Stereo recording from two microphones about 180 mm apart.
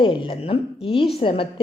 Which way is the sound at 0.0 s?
30° left (ahead or behind).